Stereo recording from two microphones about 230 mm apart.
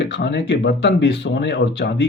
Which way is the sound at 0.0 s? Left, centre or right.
Left.